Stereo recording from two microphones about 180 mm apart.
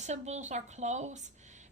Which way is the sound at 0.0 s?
40° right (ahead or behind).